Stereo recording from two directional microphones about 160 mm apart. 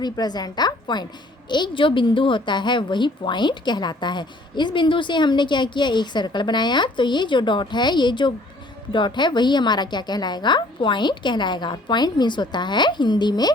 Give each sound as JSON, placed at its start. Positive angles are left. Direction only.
{"t": 0.0, "sound": "a woman's voice", "side_deg": 25}